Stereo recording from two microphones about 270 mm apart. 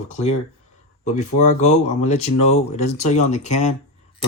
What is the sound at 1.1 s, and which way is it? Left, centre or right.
Speech, left.